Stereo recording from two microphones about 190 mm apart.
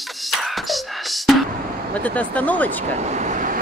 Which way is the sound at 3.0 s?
40° right (ahead or behind).